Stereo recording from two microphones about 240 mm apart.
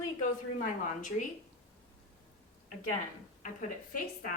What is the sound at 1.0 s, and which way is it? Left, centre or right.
Speech, left.